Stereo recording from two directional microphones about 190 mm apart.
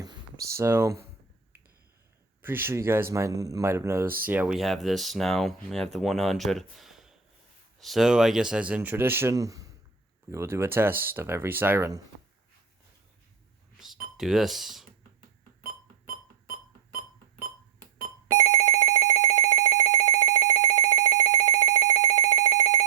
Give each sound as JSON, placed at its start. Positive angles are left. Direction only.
{"t": 0.0, "sound": "speech", "side_deg": -20}
{"t": 2.4, "sound": "a man's voice", "side_deg": -10}
{"t": 13.7, "sound": "doorbell", "side_deg": 0}
{"t": 17.9, "sound": "telephone bell ringing", "side_deg": -15}